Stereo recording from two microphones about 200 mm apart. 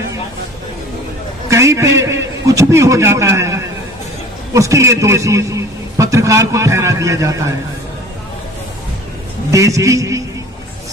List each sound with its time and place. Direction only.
1.5 s a man's voice: 15° right (ahead or behind)
9.5 s a man's voice: 15° right (ahead or behind)